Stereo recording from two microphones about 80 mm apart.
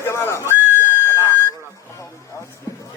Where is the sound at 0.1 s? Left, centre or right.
Left.